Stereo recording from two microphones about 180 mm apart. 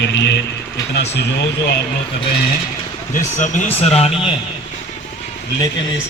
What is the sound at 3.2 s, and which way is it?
Speech, 40° left (ahead or behind).